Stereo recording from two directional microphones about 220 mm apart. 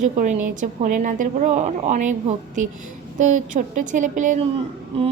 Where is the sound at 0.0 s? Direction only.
35° right (ahead or behind).